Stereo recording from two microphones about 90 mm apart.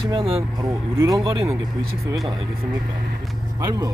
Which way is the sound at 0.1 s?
85° right.